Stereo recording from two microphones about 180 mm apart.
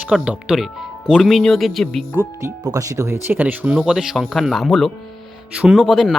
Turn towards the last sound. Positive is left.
turn(degrees=0)  # may be behind; listen again after turning